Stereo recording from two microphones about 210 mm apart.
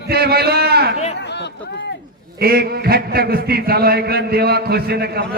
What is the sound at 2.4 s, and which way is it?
A man's voice, 45° right (ahead or behind).